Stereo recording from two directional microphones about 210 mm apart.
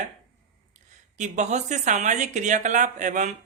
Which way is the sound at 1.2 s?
35° right (ahead or behind).